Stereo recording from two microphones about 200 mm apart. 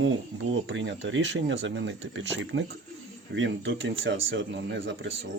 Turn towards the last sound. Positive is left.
turn(degrees=-65)  # may be behind; listen again after turning